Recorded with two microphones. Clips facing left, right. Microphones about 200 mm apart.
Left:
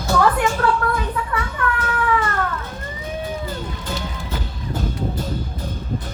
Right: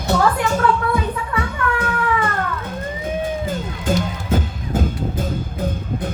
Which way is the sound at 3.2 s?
50° right (ahead or behind).